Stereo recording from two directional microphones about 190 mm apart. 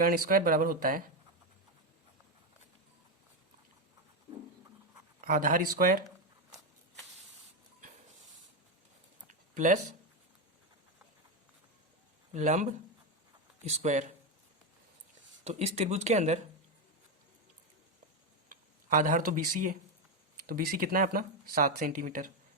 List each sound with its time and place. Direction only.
0.0 s speech: 50° right (ahead or behind)
5.2 s speech: 45° right (ahead or behind)
9.6 s speech: 40° right (ahead or behind)
12.3 s speech: 40° right (ahead or behind)
13.7 s speech: 40° right (ahead or behind)
15.4 s speech: 35° right (ahead or behind)
18.4 s speech: 45° right (ahead or behind)